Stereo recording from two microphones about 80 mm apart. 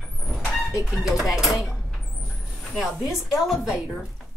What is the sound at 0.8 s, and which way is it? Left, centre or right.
A woman's voice, centre.